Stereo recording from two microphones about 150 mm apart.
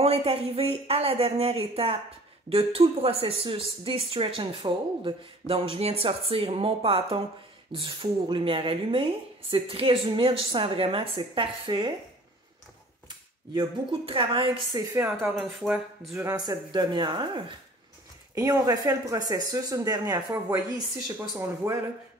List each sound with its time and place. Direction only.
0.0 s speech: 40° right (ahead or behind)
13.5 s speech: 30° right (ahead or behind)
14.8 s speech: 20° right (ahead or behind)
15.2 s speech: 5° right (ahead or behind)
16.2 s speech: 25° right (ahead or behind)